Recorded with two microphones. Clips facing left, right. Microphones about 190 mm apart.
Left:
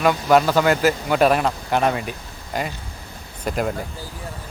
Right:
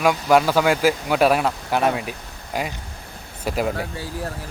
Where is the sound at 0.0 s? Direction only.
5° right (ahead or behind).